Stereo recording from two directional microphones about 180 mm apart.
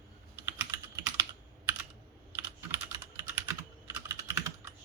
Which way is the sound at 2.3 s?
15° right (ahead or behind).